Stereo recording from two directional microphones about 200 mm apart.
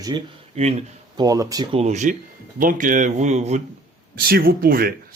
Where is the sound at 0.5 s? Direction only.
35° right (ahead or behind).